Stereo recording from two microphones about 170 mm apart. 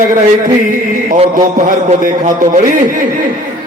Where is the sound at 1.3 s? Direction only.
50° right (ahead or behind).